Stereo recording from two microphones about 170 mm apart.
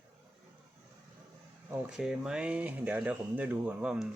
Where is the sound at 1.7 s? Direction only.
5° right (ahead or behind).